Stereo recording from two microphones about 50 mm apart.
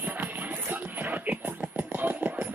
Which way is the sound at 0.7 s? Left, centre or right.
Right.